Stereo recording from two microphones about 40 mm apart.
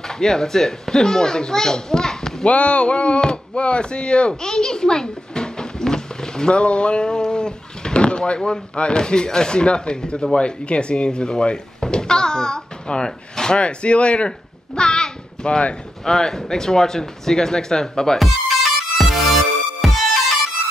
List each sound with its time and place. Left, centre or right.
0.2 s speech: centre
2.4 s speech: left
14.8 s a sound: left
16.1 s speech: centre
18.2 s music: centre